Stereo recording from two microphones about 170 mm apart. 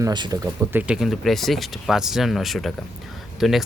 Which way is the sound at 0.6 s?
10° right (ahead or behind).